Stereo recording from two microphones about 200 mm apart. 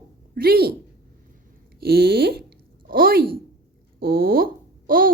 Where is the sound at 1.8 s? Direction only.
50° right (ahead or behind).